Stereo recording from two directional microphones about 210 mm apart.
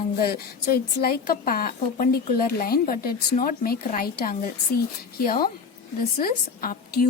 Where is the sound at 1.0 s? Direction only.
45° left (ahead or behind).